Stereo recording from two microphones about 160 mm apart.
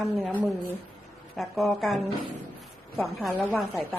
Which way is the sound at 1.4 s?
Centre (ahead or behind).